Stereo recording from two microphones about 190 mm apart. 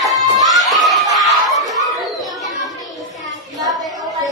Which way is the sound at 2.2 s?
Centre (ahead or behind).